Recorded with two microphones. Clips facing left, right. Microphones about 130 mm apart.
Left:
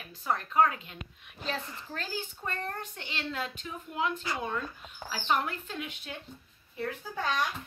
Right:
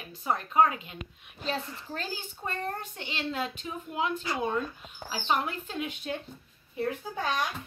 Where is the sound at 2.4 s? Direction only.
20° right (ahead or behind).